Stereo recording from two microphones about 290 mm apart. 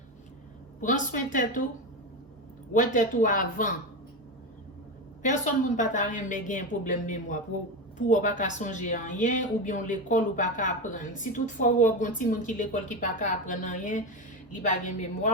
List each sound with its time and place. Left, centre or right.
0.8 s a woman's voice: left
2.7 s a woman's voice: left
5.2 s a woman's voice: left